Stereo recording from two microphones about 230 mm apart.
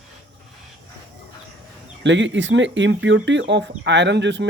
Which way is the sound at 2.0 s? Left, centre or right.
Right.